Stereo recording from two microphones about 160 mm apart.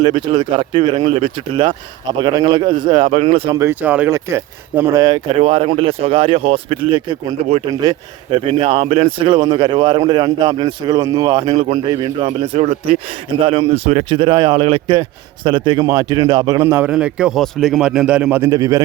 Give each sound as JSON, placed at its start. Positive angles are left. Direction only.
{"t": 0.0, "sound": "speech", "side_deg": -30}
{"t": 3.6, "sound": "speech", "side_deg": -15}
{"t": 5.3, "sound": "speech", "side_deg": -40}
{"t": 12.4, "sound": "a man's voice", "side_deg": -40}